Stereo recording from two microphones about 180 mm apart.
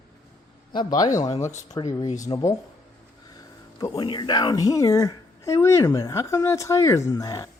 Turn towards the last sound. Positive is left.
turn(degrees=20)  # may be behind; listen again after turning